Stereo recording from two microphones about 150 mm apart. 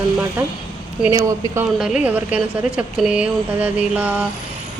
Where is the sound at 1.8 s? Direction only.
5° right (ahead or behind).